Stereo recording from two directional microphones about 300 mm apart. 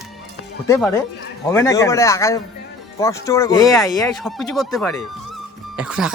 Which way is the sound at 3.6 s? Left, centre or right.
Centre.